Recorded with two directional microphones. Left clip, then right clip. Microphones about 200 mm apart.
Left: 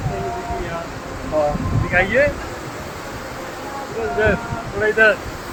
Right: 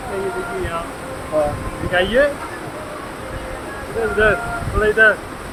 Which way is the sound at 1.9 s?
20° right (ahead or behind).